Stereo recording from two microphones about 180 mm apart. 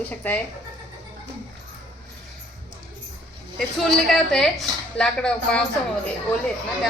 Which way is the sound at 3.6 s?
Centre (ahead or behind).